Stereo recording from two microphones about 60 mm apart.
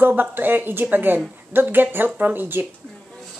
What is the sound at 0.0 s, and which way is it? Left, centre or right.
A woman's voice, right.